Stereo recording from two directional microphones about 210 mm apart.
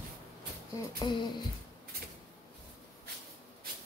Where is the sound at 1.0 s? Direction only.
20° left (ahead or behind).